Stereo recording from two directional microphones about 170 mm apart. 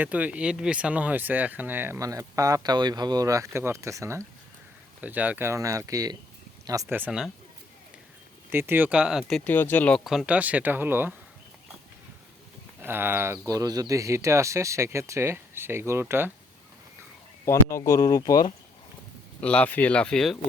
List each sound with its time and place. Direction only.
0.0 s speech: 10° right (ahead or behind)
8.4 s speech: 10° right (ahead or behind); by 10.0 s 10° left (ahead or behind)
10.1 s speech: 5° right (ahead or behind)
12.8 s speech: 10° right (ahead or behind)
17.4 s speech: 15° left (ahead or behind)
19.4 s speech: 10° left (ahead or behind)